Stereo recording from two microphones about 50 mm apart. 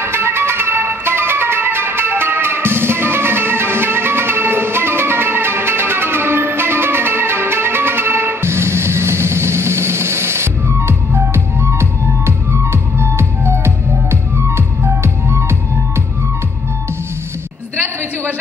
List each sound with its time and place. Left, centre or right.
0.0 s music: right